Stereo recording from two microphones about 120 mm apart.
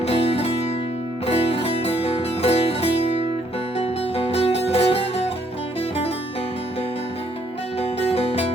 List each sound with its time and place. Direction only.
0.0 s music: 55° left (ahead or behind)
7.8 s music: 55° left (ahead or behind)